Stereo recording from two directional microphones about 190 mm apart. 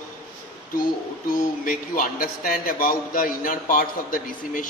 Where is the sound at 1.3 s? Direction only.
45° left (ahead or behind).